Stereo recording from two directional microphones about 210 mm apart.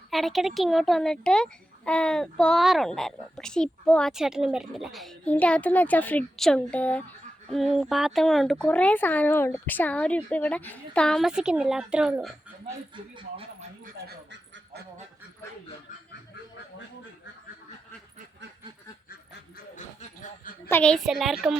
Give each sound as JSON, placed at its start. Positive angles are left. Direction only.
{"t": 0.1, "sound": "a child's voice", "side_deg": 0}
{"t": 13.1, "sound": "speech", "side_deg": -25}
{"t": 19.7, "sound": "a sound", "side_deg": 40}
{"t": 20.7, "sound": "a child's voice", "side_deg": 5}